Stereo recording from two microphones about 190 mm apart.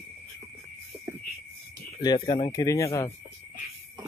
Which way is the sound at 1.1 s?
15° right (ahead or behind).